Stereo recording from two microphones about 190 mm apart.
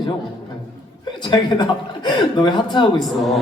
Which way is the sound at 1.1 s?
25° left (ahead or behind).